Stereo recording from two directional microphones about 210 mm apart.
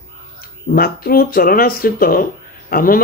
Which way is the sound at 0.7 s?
45° left (ahead or behind).